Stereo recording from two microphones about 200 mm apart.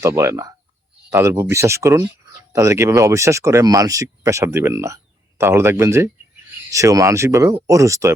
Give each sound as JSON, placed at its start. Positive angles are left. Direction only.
{"t": 0.0, "sound": "speech", "side_deg": -15}